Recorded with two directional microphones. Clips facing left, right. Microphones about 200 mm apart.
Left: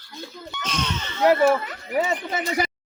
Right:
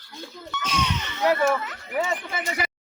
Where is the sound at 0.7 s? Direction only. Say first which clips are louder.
Right 1 dB; 15° right (ahead or behind).